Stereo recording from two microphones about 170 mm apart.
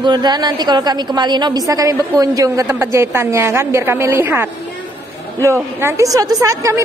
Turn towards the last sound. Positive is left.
turn(degrees=-20)  # may be behind; listen again after turning